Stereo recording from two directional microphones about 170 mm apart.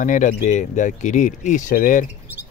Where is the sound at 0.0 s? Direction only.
50° left (ahead or behind).